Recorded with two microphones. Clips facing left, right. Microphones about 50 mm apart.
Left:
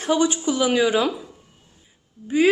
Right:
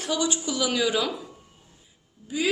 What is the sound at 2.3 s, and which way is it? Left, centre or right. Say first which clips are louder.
Speech: left 9 dB; left.